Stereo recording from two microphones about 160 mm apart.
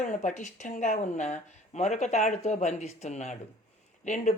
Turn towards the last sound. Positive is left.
turn(degrees=50)  # may be behind; listen again after turning